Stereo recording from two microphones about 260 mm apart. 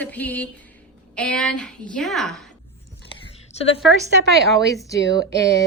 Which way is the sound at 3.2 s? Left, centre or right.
Left.